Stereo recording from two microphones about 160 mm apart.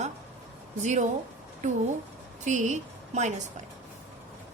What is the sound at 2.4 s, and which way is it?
Speech, 50° right (ahead or behind).